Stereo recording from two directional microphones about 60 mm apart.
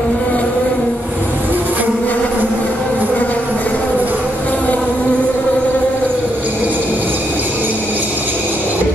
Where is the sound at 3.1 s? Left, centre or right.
Left.